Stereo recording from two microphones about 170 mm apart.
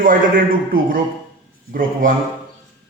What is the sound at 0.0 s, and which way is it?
A man's voice, 55° right (ahead or behind).